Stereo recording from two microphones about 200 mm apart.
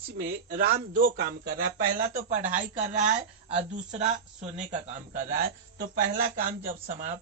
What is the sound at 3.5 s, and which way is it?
Speech, 30° right (ahead or behind).